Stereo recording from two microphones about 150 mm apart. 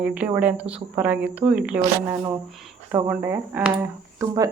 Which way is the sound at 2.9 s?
10° right (ahead or behind).